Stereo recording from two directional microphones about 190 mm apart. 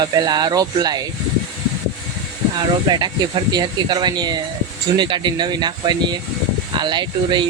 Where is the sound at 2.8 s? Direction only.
25° right (ahead or behind).